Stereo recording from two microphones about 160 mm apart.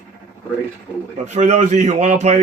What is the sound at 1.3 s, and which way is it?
A man's voice, 45° right (ahead or behind).